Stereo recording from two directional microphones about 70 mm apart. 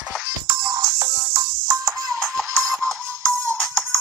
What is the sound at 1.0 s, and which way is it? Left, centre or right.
Music, right.